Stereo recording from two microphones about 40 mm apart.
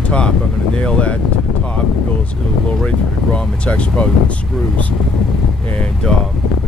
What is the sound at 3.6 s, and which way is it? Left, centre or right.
Speech, left.